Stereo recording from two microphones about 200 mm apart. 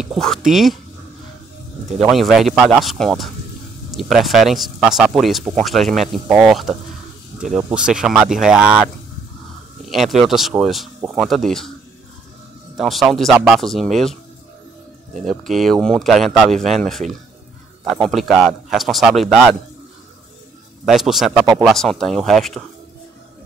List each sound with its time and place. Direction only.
0.0 s speech: centre (ahead or behind)
2.0 s speech: centre (ahead or behind)
9.8 s speech: centre (ahead or behind)
12.7 s speech: centre (ahead or behind)
15.4 s speech: centre (ahead or behind)
18.0 s speech: centre (ahead or behind)
20.8 s speech: centre (ahead or behind)